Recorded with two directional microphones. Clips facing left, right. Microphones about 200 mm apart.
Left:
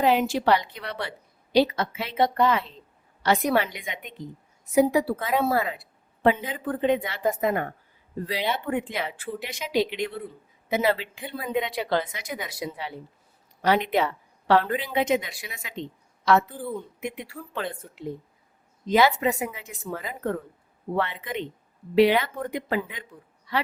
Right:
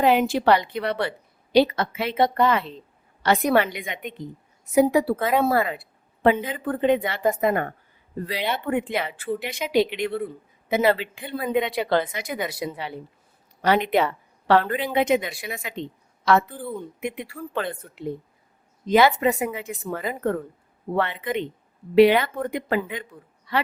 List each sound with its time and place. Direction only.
0.0 s a woman's voice: 60° right (ahead or behind)
17.0 s a woman's voice: 60° right (ahead or behind)